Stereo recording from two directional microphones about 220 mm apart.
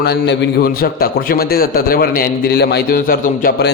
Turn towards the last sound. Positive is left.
turn(degrees=45)  # may be behind; listen again after turning